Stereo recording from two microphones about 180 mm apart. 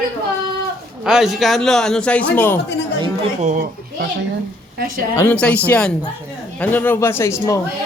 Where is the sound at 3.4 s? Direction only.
50° right (ahead or behind).